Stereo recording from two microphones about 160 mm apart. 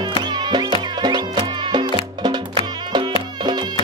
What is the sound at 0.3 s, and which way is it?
Music, 25° right (ahead or behind).